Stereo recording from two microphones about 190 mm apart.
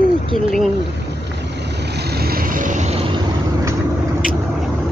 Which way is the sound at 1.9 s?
55° right (ahead or behind).